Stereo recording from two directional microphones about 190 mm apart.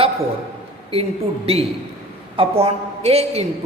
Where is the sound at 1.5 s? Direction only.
30° right (ahead or behind).